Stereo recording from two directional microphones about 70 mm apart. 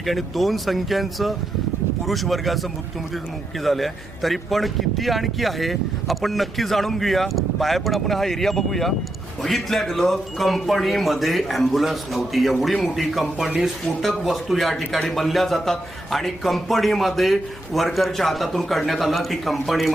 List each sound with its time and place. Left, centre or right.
0.0 s speech: centre